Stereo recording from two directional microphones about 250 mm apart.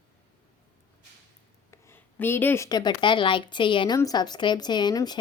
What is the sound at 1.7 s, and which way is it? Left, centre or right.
A woman's voice, centre.